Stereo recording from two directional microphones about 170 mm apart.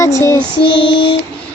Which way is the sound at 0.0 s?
20° left (ahead or behind).